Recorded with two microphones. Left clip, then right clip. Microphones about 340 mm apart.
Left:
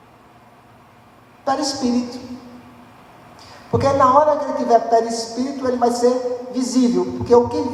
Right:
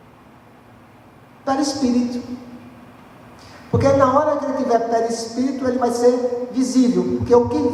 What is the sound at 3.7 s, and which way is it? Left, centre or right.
A man's voice, left.